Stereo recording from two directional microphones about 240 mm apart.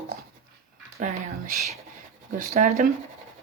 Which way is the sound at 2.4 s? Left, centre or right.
Right.